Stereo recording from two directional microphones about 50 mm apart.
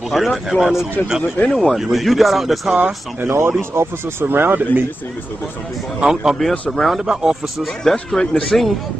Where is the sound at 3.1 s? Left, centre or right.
Right.